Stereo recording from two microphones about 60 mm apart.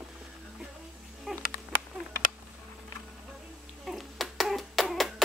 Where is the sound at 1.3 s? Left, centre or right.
Centre.